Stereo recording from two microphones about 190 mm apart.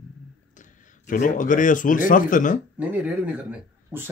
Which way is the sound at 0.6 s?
45° left (ahead or behind).